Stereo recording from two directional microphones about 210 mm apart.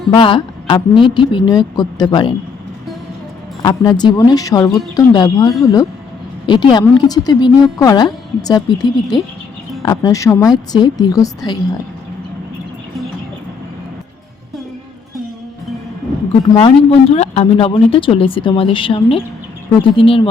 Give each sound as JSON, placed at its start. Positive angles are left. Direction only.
{"t": 0.1, "sound": "a woman's voice", "side_deg": 25}
{"t": 3.6, "sound": "a woman's voice", "side_deg": 20}
{"t": 16.6, "sound": "a woman's voice", "side_deg": 25}